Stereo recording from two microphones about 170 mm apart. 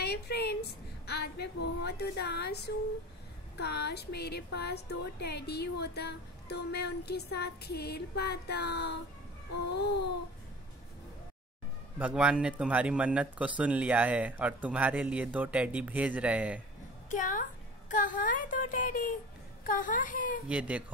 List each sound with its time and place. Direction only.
0.0 s a woman's voice: 70° left (ahead or behind)
12.0 s speech: 5° right (ahead or behind)
17.1 s a woman's voice: 50° left (ahead or behind)
20.4 s speech: 10° right (ahead or behind)